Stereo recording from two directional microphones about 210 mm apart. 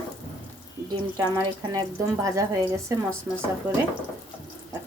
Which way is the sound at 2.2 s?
15° right (ahead or behind).